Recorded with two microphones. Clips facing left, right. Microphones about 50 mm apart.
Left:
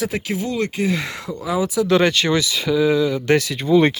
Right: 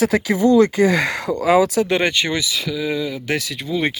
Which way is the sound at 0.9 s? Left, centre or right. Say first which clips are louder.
Right 7 dB; right.